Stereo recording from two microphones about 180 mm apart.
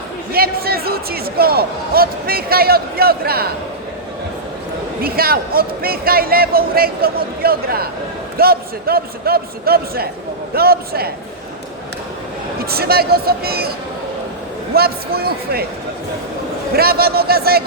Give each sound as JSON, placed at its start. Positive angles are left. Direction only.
{"t": 0.3, "sound": "a sound", "side_deg": -55}
{"t": 5.0, "sound": "a man's voice", "side_deg": -55}
{"t": 12.6, "sound": "a man's voice", "side_deg": -60}
{"t": 16.7, "sound": "a man's voice", "side_deg": -60}